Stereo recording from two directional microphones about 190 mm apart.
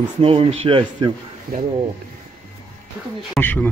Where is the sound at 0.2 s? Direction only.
30° right (ahead or behind).